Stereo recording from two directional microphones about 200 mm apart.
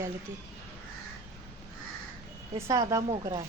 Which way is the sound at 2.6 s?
15° right (ahead or behind).